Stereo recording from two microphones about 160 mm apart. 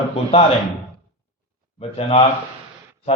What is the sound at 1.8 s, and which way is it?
Speech, 40° left (ahead or behind).